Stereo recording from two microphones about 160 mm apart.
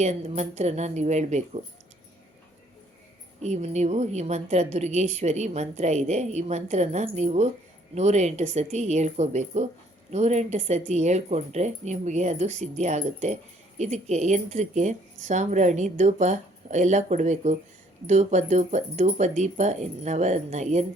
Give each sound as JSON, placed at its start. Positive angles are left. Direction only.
{"t": 0.0, "sound": "speech", "side_deg": -45}
{"t": 3.4, "sound": "speech", "side_deg": -45}